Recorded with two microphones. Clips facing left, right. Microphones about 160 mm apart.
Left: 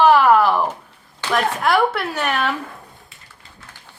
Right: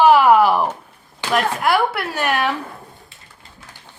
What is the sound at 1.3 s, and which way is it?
Speech, centre (ahead or behind).